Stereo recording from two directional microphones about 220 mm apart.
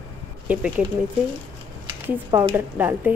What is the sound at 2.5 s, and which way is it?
Speech, 10° right (ahead or behind).